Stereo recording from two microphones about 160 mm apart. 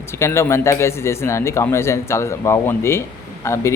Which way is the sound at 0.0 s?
15° left (ahead or behind).